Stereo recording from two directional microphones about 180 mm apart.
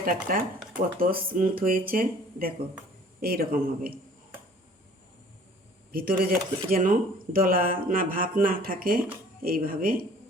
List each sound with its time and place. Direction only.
0.0 s a man's voice: 50° right (ahead or behind)
5.9 s a man's voice: 55° right (ahead or behind)